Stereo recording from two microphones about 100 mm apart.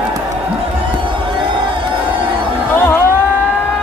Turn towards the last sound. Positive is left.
turn(degrees=25)  # may be behind; listen again after turning